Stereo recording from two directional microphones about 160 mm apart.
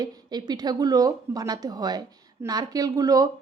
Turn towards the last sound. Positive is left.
turn(degrees=-20)  # may be behind; listen again after turning